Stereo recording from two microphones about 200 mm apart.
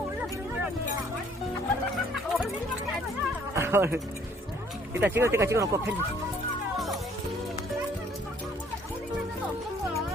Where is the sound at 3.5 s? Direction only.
10° right (ahead or behind).